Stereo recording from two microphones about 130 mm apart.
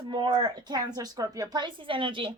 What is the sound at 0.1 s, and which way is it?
Speech, 35° right (ahead or behind).